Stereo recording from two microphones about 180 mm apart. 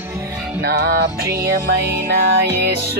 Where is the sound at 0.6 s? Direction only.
60° right (ahead or behind).